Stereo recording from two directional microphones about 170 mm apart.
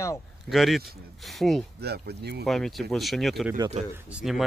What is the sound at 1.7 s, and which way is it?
Speech, 70° right (ahead or behind).